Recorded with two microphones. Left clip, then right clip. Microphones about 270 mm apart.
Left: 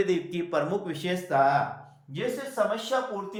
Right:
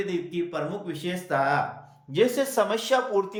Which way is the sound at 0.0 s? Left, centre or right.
Centre.